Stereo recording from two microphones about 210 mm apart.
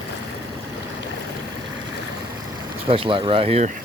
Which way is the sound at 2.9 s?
25° right (ahead or behind).